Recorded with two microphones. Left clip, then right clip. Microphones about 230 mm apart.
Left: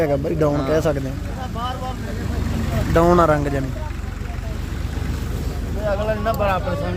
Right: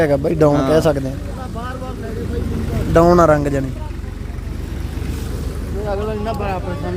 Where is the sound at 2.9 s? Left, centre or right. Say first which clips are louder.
Right 4 dB; centre.